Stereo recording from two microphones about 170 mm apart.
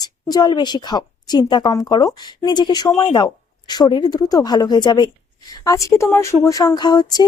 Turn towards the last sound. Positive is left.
turn(degrees=25)  # may be behind; listen again after turning